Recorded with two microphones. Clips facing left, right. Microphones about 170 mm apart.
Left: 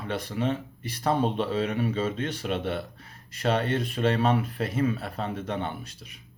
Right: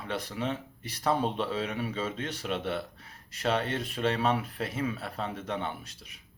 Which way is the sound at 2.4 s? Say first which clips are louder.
Even; 50° left (ahead or behind).